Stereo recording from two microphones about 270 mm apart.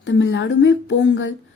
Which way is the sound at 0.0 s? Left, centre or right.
Left.